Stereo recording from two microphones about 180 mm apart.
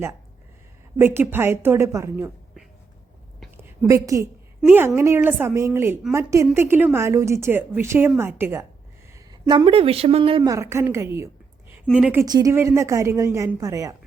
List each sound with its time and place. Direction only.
0.9 s a woman's voice: 10° right (ahead or behind)
3.6 s a woman's voice: 20° right (ahead or behind)
9.1 s speech: 20° right (ahead or behind)
10.4 s a woman's voice: 15° right (ahead or behind)
12.2 s a woman's voice: 20° right (ahead or behind)